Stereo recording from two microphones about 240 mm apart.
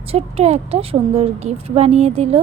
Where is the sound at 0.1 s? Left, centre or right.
Right.